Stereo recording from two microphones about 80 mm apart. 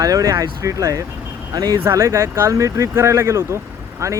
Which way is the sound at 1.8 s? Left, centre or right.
Right.